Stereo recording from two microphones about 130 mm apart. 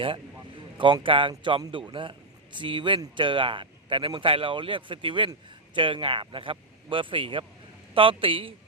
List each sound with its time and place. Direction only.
1.0 s a man's voice: 40° right (ahead or behind)